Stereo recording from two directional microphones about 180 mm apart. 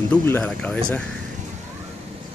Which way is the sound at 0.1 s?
10° left (ahead or behind).